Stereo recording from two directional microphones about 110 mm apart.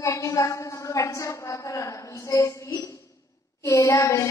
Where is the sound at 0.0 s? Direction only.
30° left (ahead or behind).